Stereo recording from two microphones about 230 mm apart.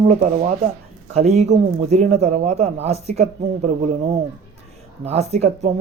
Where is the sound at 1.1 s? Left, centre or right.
Right.